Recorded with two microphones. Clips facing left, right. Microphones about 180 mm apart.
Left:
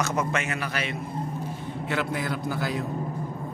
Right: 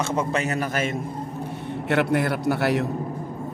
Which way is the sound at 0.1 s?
35° right (ahead or behind).